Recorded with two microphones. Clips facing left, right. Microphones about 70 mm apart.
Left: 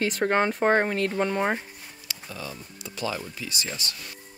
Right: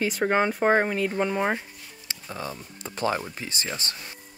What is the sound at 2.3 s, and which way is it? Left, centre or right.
Speech, right.